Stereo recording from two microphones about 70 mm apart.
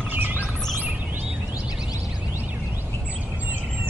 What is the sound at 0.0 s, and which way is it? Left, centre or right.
Bird, right.